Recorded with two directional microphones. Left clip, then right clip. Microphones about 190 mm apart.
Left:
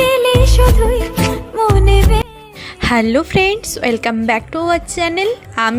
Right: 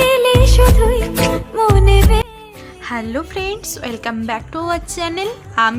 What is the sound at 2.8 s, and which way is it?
A woman's voice, 30° left (ahead or behind).